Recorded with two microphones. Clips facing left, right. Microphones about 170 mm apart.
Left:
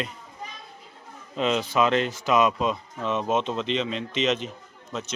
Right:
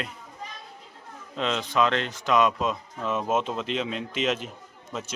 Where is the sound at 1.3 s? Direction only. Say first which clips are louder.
Left 3 dB; 5° left (ahead or behind).